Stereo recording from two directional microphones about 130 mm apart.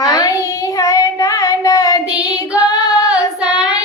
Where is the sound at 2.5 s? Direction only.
25° left (ahead or behind).